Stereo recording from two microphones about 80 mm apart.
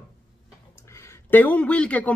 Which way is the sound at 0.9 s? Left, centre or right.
Left.